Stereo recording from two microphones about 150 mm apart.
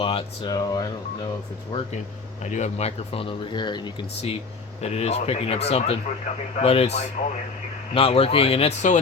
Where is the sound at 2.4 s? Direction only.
50° left (ahead or behind); by 3.8 s 30° left (ahead or behind).